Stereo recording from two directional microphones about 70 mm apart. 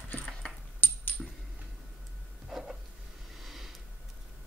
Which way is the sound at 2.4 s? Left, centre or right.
Centre.